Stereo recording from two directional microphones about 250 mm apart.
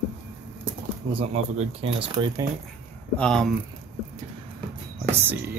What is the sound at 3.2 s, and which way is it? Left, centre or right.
Speech, centre.